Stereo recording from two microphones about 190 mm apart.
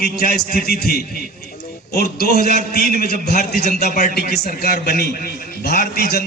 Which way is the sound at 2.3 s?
40° right (ahead or behind).